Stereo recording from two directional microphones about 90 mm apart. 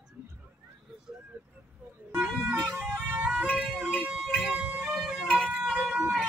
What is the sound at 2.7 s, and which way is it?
Music, 20° right (ahead or behind).